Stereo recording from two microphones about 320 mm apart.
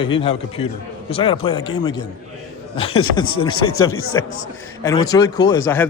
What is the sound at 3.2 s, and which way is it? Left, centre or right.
Speech, centre.